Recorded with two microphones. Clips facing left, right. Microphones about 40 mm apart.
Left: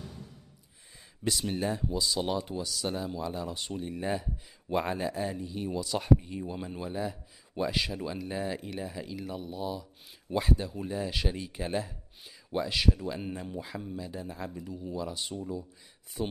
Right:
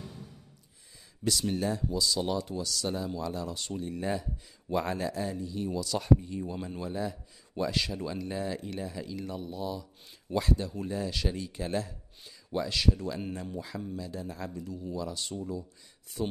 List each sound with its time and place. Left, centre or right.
1.5 s speech: left